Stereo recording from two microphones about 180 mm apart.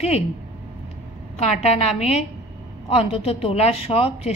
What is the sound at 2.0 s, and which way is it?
A woman's voice, 35° left (ahead or behind).